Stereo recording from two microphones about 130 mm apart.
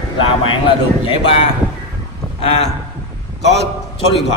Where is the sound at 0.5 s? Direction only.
45° left (ahead or behind).